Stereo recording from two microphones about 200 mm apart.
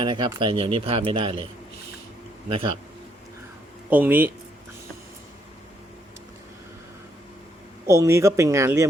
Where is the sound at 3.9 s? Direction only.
10° right (ahead or behind).